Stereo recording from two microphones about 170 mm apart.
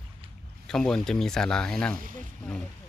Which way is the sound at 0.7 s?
5° left (ahead or behind).